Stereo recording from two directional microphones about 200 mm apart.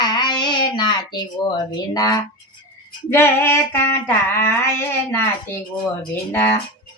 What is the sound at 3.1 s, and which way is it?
Female singing, 10° left (ahead or behind).